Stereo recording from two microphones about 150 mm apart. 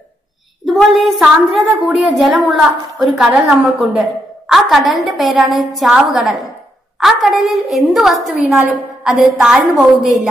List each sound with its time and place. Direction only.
0.7 s a woman's voice: centre (ahead or behind)